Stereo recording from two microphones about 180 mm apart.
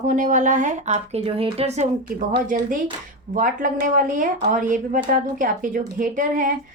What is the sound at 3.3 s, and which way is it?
Speech, 50° right (ahead or behind).